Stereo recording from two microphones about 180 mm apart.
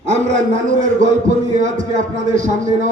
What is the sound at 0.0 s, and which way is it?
A man's voice, 40° right (ahead or behind).